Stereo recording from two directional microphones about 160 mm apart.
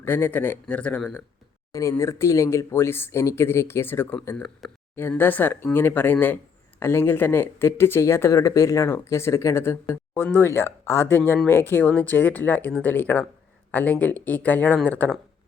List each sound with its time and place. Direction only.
0.0 s speech: 10° left (ahead or behind)
1.7 s speech: 20° left (ahead or behind)